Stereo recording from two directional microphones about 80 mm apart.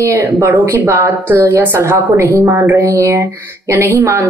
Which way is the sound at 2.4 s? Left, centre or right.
Right.